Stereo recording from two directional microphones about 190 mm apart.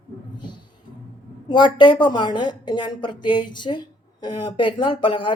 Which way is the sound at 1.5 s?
25° left (ahead or behind).